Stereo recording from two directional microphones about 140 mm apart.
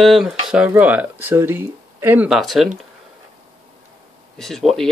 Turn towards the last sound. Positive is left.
turn(degrees=5)  # may be behind; listen again after turning